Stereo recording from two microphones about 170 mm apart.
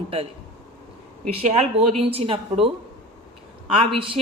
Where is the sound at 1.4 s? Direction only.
40° right (ahead or behind).